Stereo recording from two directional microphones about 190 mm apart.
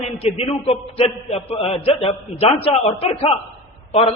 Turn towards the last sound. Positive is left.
turn(degrees=30)  # may be behind; listen again after turning